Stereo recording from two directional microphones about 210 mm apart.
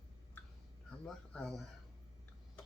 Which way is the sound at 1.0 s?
Centre (ahead or behind).